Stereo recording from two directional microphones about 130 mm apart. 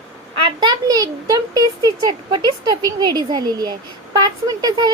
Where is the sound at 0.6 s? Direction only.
30° right (ahead or behind).